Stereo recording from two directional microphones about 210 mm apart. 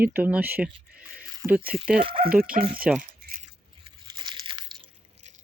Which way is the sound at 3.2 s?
40° right (ahead or behind).